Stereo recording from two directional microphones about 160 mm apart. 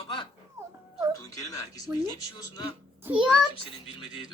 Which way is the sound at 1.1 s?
20° left (ahead or behind).